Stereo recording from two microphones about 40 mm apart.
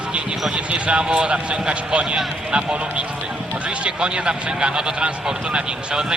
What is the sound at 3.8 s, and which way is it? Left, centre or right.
Speech, right.